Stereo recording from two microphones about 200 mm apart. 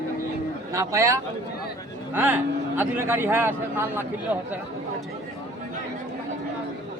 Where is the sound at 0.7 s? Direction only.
15° right (ahead or behind).